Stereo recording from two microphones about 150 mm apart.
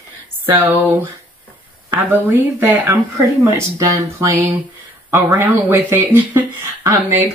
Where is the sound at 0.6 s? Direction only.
15° right (ahead or behind).